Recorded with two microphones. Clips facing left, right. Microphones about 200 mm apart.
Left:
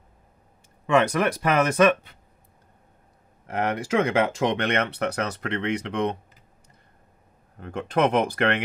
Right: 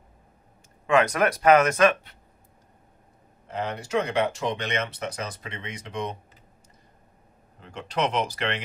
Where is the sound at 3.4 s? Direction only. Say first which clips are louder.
Left 5 dB; 90° left; by 6.1 s 65° left (ahead or behind).